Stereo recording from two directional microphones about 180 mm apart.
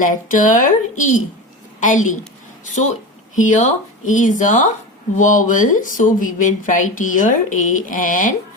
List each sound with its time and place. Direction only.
0.0 s speech: 45° left (ahead or behind)
3.3 s speech: 45° left (ahead or behind)